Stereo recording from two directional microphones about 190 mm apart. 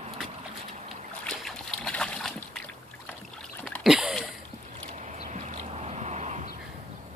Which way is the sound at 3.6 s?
Centre (ahead or behind).